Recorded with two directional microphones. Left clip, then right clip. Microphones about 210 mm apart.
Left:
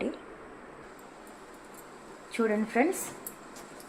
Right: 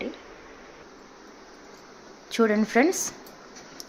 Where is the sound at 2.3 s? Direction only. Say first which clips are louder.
Right 6 dB; 35° right (ahead or behind).